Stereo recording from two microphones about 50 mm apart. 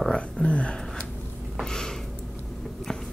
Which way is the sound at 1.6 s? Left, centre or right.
Centre.